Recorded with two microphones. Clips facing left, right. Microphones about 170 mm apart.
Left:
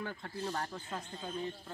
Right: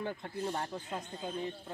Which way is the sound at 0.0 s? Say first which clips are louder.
Right 3 dB; 20° right (ahead or behind).